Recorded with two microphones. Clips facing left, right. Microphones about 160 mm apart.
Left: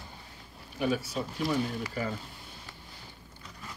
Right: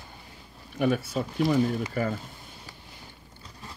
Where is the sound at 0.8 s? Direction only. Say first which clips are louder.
Right 4 dB; 55° right (ahead or behind).